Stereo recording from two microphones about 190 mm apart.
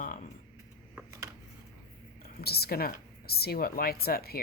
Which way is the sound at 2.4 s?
55° left (ahead or behind).